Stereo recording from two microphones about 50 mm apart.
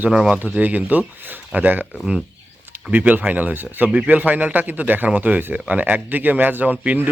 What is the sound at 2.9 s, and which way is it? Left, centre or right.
Speech, right.